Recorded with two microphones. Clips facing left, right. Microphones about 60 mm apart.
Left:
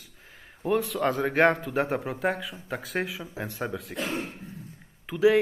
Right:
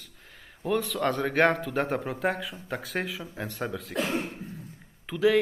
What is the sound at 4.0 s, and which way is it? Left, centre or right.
Speech, right.